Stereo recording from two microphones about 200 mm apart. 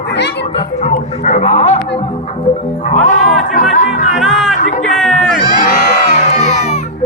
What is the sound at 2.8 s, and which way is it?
Music, 40° left (ahead or behind).